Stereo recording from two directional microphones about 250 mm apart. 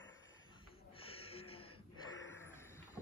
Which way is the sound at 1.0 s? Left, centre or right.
Left.